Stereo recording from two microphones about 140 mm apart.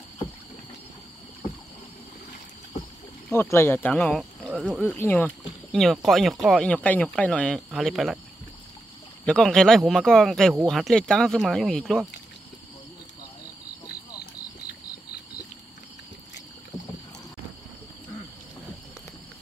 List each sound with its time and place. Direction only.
3.5 s speech: 15° left (ahead or behind); by 4.8 s centre (ahead or behind)
4.8 s speech: 15° left (ahead or behind)
5.7 s speech: centre (ahead or behind)
9.2 s speech: 5° left (ahead or behind)
16.7 s rowboat: 30° left (ahead or behind)